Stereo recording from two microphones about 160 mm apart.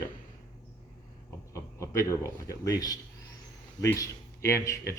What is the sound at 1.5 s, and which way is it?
A man's voice, 20° left (ahead or behind).